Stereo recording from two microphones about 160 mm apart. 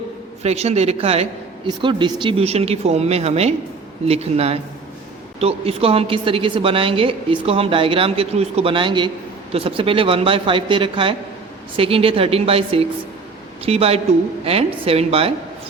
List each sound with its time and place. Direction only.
0.4 s a woman's voice: 40° right (ahead or behind)
1.6 s a woman's voice: 30° right (ahead or behind)